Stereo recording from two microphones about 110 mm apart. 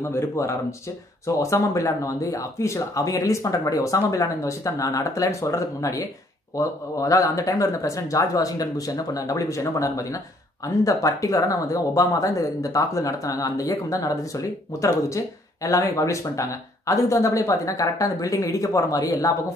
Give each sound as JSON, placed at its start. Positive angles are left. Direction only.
{"t": 0.0, "sound": "speech", "side_deg": 25}